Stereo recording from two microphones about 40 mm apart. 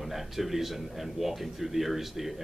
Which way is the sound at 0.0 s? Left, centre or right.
Centre.